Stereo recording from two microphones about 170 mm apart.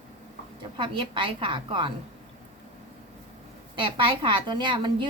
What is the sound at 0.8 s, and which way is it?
A woman's voice, 30° right (ahead or behind).